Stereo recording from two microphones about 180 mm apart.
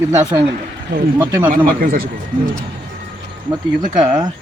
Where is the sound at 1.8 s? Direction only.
55° right (ahead or behind).